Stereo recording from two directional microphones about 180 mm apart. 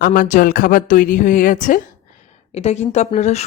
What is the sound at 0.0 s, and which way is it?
A woman's voice, 50° left (ahead or behind).